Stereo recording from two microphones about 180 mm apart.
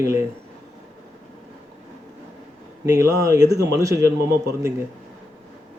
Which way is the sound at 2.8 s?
20° right (ahead or behind).